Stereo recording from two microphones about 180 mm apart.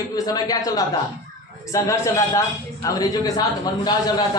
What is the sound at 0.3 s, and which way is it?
A man's voice, 20° left (ahead or behind).